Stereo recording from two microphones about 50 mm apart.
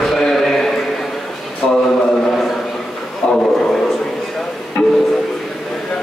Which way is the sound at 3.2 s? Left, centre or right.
Left.